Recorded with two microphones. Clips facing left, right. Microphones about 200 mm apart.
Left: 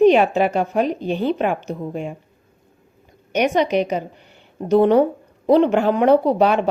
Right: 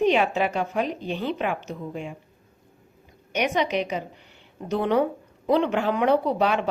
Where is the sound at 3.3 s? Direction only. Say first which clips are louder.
Left 6 dB; 45° left (ahead or behind).